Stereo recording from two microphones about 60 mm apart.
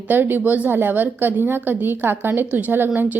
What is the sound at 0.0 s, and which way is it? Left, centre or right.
A woman's voice, right.